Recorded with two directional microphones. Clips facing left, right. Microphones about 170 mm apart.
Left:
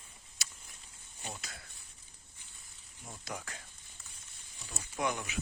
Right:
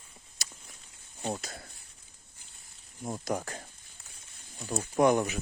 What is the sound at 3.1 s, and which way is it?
Speech, 45° right (ahead or behind).